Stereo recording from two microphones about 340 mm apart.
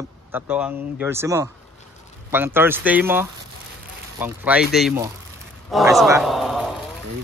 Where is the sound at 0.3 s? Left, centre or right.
Centre.